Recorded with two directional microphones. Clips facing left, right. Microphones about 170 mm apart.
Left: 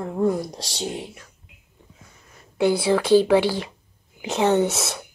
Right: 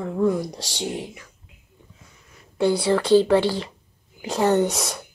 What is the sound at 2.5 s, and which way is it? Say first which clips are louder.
Speech: even; 5° left (ahead or behind).